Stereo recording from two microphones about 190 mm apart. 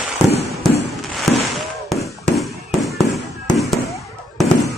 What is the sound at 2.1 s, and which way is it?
Fireworks, centre (ahead or behind).